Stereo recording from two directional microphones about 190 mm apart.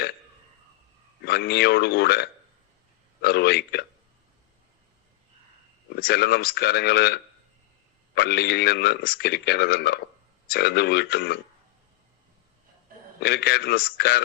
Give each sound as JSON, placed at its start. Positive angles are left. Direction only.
{"t": 1.2, "sound": "speech", "side_deg": 60}
{"t": 6.0, "sound": "speech", "side_deg": 55}
{"t": 13.1, "sound": "speech", "side_deg": 60}